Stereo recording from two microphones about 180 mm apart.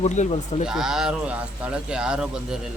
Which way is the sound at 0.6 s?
5° right (ahead or behind).